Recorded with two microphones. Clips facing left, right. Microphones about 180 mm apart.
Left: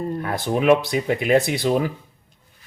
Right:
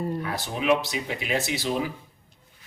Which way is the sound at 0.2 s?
55° left (ahead or behind).